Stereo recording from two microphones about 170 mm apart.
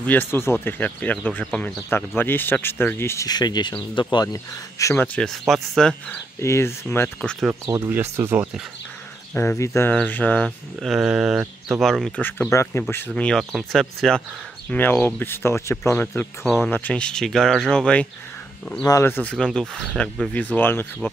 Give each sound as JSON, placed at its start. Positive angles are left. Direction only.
{"t": 0.0, "sound": "speech", "side_deg": 10}
{"t": 6.4, "sound": "speech", "side_deg": 15}
{"t": 7.6, "sound": "speech", "side_deg": -15}
{"t": 9.3, "sound": "speech", "side_deg": 10}
{"t": 18.8, "sound": "speech", "side_deg": 20}